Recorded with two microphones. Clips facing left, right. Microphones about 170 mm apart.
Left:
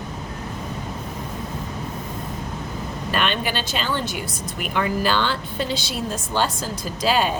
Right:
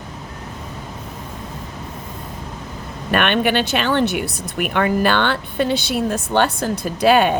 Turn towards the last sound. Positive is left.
turn(degrees=-60)  # may be behind; listen again after turning